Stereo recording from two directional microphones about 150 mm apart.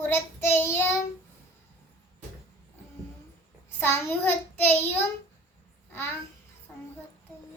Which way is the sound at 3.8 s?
15° left (ahead or behind).